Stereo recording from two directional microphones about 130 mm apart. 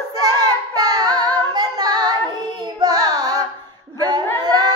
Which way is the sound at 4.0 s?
30° right (ahead or behind).